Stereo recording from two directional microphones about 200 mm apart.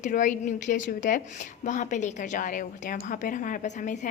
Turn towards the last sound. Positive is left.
turn(degrees=40)  # may be behind; listen again after turning